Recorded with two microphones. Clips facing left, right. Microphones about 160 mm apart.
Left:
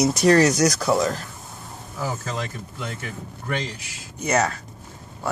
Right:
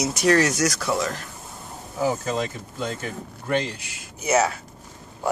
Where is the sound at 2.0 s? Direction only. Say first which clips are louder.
Right 5 dB; 20° right (ahead or behind).